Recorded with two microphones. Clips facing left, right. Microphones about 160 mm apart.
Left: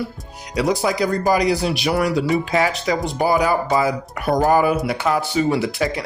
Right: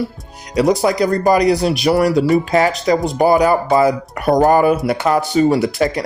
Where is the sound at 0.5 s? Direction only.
45° right (ahead or behind).